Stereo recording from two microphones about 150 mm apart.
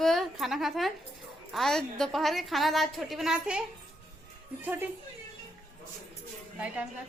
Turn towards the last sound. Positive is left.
turn(degrees=-10)  # may be behind; listen again after turning